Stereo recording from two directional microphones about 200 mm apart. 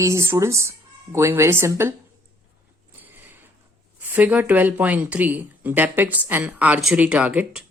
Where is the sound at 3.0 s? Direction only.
10° right (ahead or behind).